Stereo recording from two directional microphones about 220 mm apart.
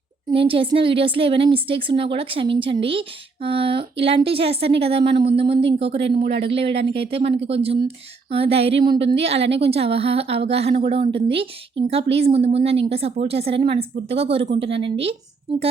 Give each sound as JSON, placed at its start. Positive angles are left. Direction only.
{"t": 0.3, "sound": "a woman's voice", "side_deg": -25}
{"t": 6.2, "sound": "speech", "side_deg": -50}
{"t": 6.5, "sound": "a woman's voice", "side_deg": -25}